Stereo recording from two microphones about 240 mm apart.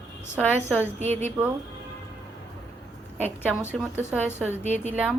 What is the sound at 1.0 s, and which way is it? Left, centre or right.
Speech, right.